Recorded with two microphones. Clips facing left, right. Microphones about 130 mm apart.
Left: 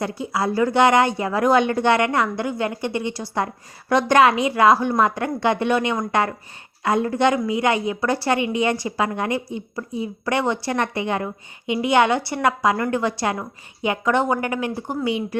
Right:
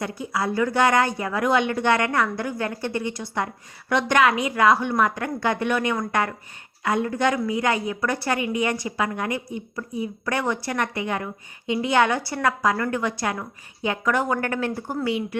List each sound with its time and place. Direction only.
0.0 s a woman's voice: 30° left (ahead or behind)
3.1 s a woman's voice: 35° left (ahead or behind)
11.6 s a woman's voice: 15° left (ahead or behind)
14.3 s speech: 15° left (ahead or behind)